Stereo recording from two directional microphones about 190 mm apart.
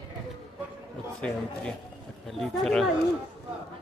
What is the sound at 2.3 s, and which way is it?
Speech, centre (ahead or behind).